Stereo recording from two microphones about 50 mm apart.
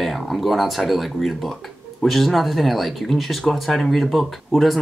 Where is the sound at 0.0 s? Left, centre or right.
Centre.